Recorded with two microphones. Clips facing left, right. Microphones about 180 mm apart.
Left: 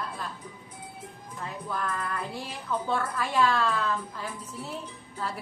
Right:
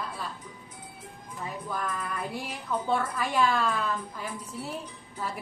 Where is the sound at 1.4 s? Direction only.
10° right (ahead or behind).